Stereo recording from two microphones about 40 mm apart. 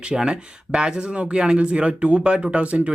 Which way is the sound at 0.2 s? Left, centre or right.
Right.